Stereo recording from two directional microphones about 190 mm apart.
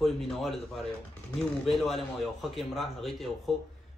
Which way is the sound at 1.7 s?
Centre (ahead or behind).